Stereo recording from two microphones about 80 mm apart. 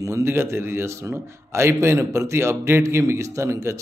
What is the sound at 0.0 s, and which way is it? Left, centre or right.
Speech, right.